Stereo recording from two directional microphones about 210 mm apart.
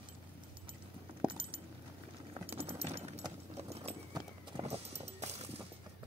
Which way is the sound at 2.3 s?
30° right (ahead or behind).